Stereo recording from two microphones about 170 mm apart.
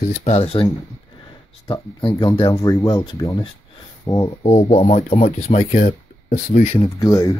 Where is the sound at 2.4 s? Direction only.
20° left (ahead or behind).